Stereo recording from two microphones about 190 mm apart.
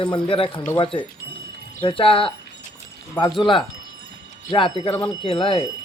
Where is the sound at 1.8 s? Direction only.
25° left (ahead or behind).